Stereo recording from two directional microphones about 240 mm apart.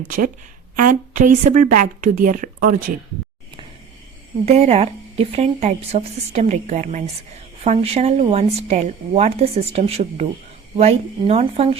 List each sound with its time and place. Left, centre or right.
0.8 s a woman's voice: right
4.4 s a woman's voice: right